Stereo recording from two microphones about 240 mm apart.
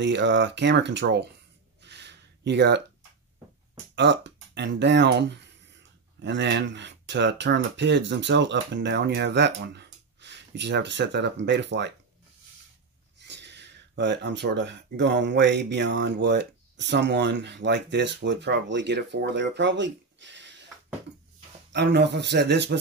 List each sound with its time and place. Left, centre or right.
0.0 s speech: right
1.8 s a sound: right
3.9 s speech: right
13.2 s speech: right
21.7 s speech: right